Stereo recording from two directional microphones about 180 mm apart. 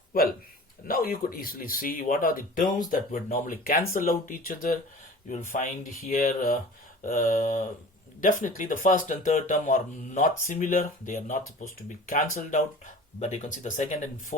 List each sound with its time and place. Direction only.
0.1 s a man's voice: 55° left (ahead or behind)